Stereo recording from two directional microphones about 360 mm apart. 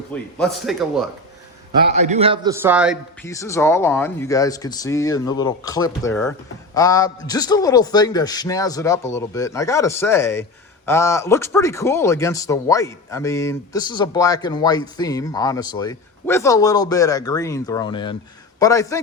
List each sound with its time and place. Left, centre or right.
0.1 s a man's voice: centre
1.7 s a man's voice: centre